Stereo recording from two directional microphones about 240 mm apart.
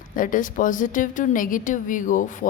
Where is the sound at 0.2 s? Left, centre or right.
Left.